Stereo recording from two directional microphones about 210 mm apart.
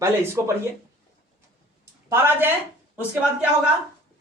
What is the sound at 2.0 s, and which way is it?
Speech, 10° right (ahead or behind).